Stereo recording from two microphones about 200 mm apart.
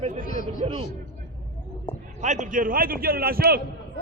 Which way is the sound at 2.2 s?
35° right (ahead or behind).